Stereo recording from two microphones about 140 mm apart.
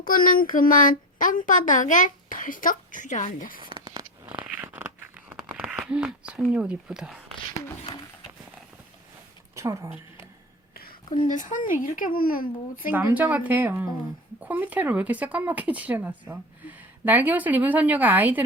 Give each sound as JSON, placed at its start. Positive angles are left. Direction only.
{"t": 0.0, "sound": "a woman's voice", "side_deg": 90}
{"t": 3.6, "sound": "a sound", "side_deg": -35}
{"t": 4.3, "sound": "a sound", "side_deg": -10}
{"t": 9.6, "sound": "speech", "side_deg": -20}
{"t": 11.3, "sound": "a woman's voice", "side_deg": 65}
{"t": 12.9, "sound": "speech", "side_deg": -15}